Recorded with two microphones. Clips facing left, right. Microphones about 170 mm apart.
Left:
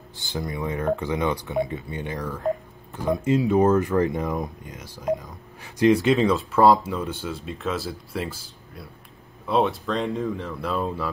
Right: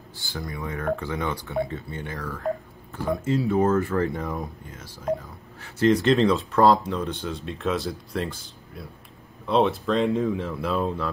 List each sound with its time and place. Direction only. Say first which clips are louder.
0.2 s speech: left 4 dB; 20° left (ahead or behind); by 11.1 s centre (ahead or behind)